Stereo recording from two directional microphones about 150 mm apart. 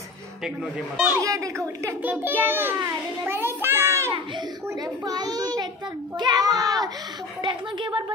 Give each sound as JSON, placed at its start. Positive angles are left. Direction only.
{"t": 0.9, "sound": "a child's voice", "side_deg": -10}
{"t": 1.2, "sound": "a child's voice", "side_deg": -20}
{"t": 2.8, "sound": "child singing", "side_deg": -15}
{"t": 5.0, "sound": "a child's voice", "side_deg": -25}